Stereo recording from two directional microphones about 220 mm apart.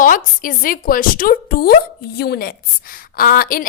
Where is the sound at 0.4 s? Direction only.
40° left (ahead or behind).